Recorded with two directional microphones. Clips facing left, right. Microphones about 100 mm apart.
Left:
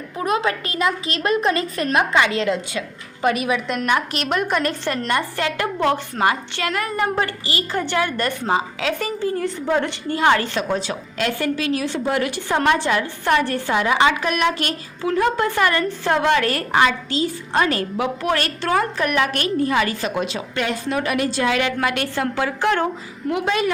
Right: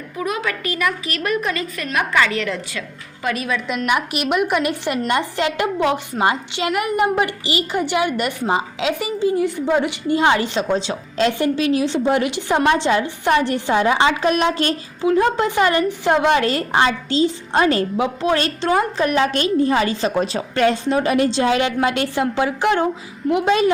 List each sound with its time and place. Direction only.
0.2 s a woman's voice: 30° left (ahead or behind)
3.8 s a woman's voice: 15° right (ahead or behind)